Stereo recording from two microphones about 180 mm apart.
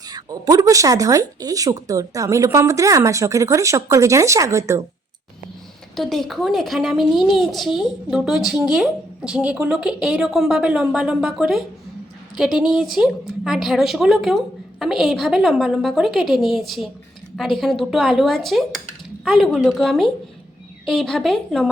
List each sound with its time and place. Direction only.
0.1 s speech: 20° right (ahead or behind)
6.0 s a woman's voice: centre (ahead or behind)